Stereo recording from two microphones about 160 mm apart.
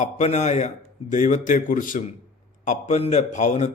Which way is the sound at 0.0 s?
45° left (ahead or behind).